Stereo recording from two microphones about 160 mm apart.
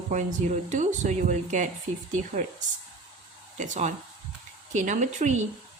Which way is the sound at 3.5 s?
50° right (ahead or behind).